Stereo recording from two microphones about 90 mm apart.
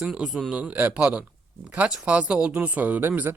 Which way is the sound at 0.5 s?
15° right (ahead or behind).